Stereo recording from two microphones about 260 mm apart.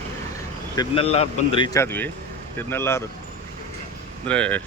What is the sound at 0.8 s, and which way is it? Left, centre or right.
Speech, left.